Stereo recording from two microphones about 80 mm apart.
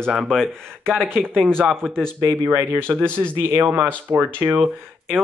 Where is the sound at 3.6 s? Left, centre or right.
Right.